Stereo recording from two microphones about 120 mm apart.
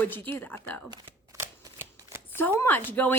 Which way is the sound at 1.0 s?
25° right (ahead or behind).